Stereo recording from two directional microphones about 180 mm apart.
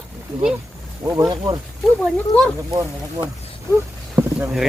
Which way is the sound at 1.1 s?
20° right (ahead or behind).